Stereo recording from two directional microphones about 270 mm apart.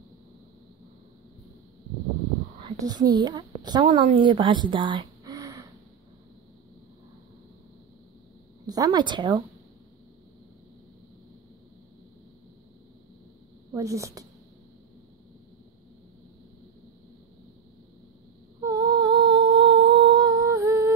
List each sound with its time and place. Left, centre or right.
2.6 s a woman's voice: centre
8.6 s a woman's voice: centre
13.7 s a woman's voice: centre
18.6 s humming: centre